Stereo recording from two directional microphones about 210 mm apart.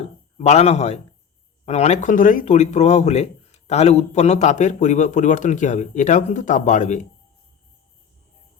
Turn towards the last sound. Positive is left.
turn(degrees=35)  # may be behind; listen again after turning